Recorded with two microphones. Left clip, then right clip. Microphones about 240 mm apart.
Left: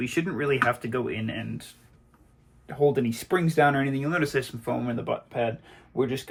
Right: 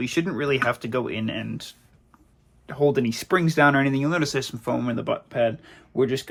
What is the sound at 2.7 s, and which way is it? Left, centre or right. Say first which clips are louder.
Speech: right 2 dB; right.